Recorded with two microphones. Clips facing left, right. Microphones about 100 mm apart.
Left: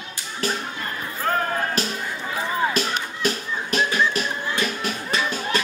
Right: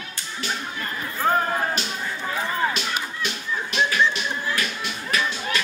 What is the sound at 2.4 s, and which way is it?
Music, 10° left (ahead or behind).